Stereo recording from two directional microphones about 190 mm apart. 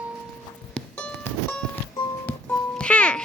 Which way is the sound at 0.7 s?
5° left (ahead or behind).